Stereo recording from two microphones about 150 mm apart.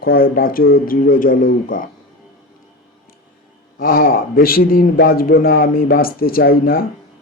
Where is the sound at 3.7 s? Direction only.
80° left.